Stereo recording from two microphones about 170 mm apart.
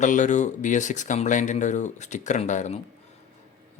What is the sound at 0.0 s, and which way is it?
Speech, 45° left (ahead or behind).